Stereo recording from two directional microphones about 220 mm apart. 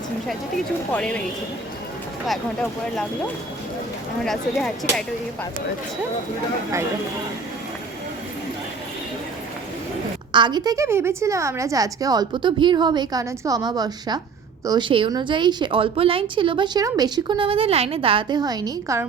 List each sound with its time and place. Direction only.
0.9 s speech: 5° left (ahead or behind)
2.2 s speech: centre (ahead or behind)
4.2 s speech: centre (ahead or behind)
10.3 s a woman's voice: 20° right (ahead or behind)